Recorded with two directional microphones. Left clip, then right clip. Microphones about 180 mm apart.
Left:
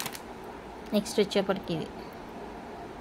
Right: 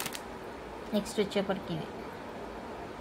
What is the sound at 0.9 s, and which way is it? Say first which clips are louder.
Speech: left 4 dB; 55° left (ahead or behind).